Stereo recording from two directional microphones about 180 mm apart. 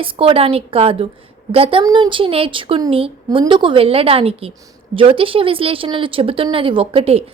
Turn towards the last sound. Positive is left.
turn(degrees=-30)  # may be behind; listen again after turning